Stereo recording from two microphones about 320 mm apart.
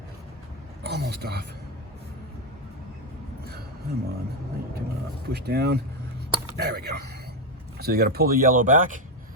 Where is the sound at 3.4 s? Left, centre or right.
Right.